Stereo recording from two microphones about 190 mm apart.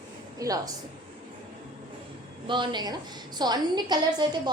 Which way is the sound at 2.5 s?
25° right (ahead or behind).